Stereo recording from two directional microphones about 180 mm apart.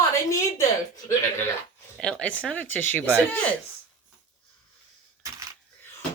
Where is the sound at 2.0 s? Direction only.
5° left (ahead or behind).